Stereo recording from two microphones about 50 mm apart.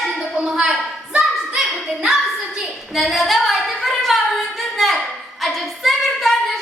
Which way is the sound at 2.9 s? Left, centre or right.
Centre.